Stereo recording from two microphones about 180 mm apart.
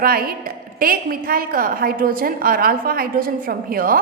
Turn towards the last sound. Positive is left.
turn(degrees=-55)  # may be behind; listen again after turning